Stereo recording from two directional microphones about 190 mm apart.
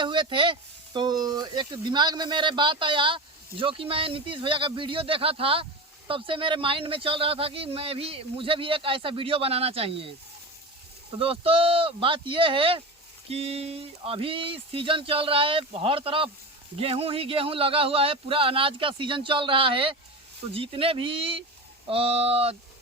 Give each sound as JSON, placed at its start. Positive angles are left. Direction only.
{"t": 0.0, "sound": "speech", "side_deg": -25}
{"t": 11.2, "sound": "speech", "side_deg": -30}